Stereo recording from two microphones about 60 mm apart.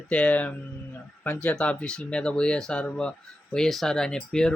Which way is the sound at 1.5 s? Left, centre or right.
Centre.